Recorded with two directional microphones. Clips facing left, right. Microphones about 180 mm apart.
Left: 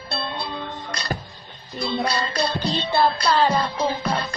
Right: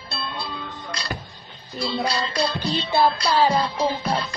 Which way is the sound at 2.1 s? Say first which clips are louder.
Even; 50° left (ahead or behind).